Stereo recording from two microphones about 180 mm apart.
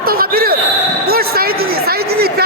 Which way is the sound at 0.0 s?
55° right (ahead or behind).